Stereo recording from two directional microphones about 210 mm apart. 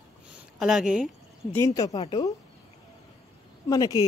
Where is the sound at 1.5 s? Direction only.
15° left (ahead or behind).